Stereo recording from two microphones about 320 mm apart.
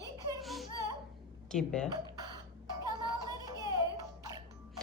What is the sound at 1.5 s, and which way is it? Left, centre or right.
Speech, centre.